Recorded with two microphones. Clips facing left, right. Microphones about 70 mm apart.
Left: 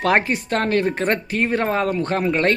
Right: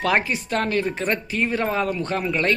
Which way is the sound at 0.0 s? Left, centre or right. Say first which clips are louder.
Left 3 dB; left.